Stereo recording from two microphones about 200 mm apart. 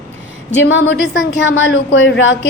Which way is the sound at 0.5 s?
65° left (ahead or behind).